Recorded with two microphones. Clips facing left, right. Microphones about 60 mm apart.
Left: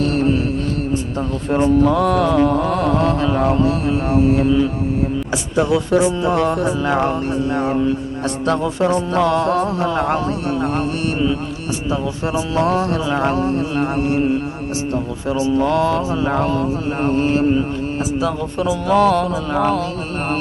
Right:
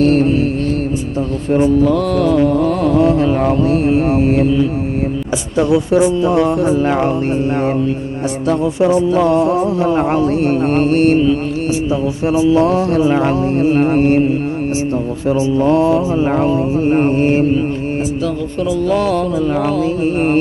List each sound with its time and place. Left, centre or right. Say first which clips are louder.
0.0 s mantra: right 7 dB; right
1.8 s mantra: right 1 dB; centre
3.7 s mantra: right 5 dB; right
5.7 s mantra: right 5 dB; right
8.4 s speech: right 4 dB; centre
9.3 s music: right 3 dB; left
9.8 s mantra: right 4 dB; right
13.1 s mantra: right 3 dB; left
13.5 s mantra: right 7 dB; right
15.3 s mantra: right 4 dB; right
18.9 s mantra: left 3 dB; centre